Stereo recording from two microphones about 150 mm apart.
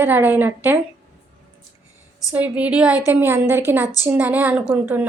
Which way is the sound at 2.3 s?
10° right (ahead or behind).